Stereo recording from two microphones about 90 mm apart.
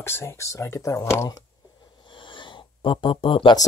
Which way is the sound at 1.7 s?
60° left (ahead or behind).